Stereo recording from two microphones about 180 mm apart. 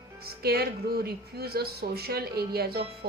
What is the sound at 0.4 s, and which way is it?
Speech, 60° right (ahead or behind).